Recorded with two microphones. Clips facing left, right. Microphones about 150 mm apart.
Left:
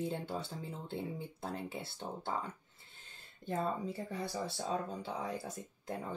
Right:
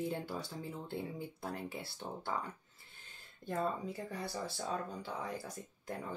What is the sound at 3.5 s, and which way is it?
Speech, 25° left (ahead or behind).